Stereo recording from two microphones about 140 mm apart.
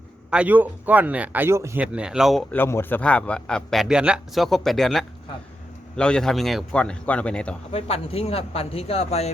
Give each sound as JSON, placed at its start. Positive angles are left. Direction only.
{"t": 0.3, "sound": "speech", "side_deg": -10}
{"t": 2.5, "sound": "a man's voice", "side_deg": 15}
{"t": 7.7, "sound": "speech", "side_deg": 45}